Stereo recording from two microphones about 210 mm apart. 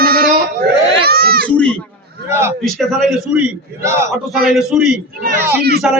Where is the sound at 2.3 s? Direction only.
10° right (ahead or behind).